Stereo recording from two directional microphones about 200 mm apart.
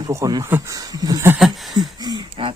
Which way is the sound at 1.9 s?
20° right (ahead or behind).